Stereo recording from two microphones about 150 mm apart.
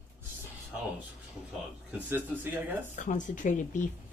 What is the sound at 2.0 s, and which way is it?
Speech, 15° right (ahead or behind).